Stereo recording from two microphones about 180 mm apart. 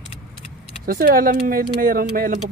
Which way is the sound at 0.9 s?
55° right (ahead or behind).